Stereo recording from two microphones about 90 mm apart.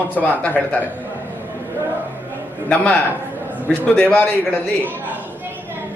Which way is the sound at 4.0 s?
10° left (ahead or behind).